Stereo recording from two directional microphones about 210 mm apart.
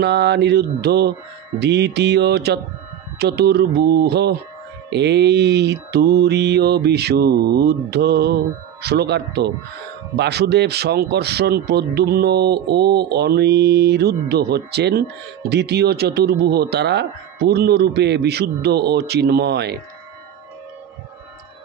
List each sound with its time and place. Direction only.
0.0 s a man's voice: 55° right (ahead or behind)